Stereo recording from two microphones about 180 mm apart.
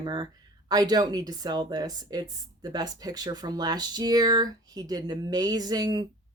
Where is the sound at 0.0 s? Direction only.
25° right (ahead or behind).